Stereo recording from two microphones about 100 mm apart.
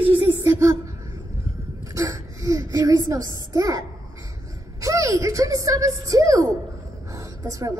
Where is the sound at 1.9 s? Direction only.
35° right (ahead or behind).